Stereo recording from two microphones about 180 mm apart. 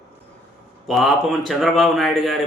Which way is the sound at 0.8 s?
Centre (ahead or behind).